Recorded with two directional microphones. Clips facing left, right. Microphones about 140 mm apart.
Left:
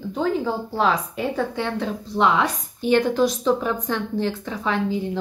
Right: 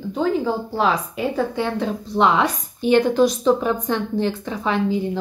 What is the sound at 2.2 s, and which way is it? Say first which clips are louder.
A woman's voice: right 2 dB; 25° right (ahead or behind).